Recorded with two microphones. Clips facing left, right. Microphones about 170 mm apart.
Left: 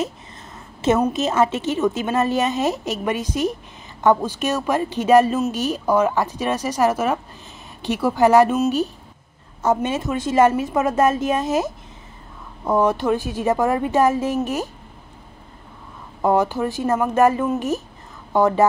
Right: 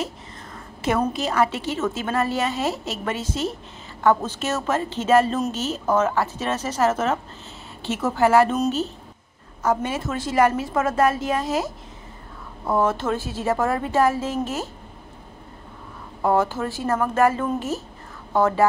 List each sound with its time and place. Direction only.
1.1 s a woman's voice: 20° left (ahead or behind)
9.8 s a woman's voice: 20° left (ahead or behind)
16.2 s speech: 15° left (ahead or behind)